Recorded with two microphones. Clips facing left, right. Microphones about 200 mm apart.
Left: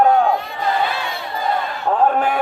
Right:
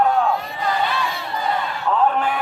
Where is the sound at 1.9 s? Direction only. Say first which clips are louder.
Left 3 dB; 45° left (ahead or behind).